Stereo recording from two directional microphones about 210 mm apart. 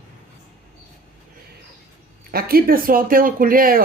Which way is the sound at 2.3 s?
45° right (ahead or behind).